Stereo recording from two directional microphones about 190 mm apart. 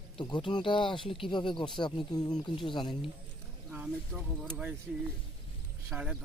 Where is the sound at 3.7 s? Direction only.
5° right (ahead or behind).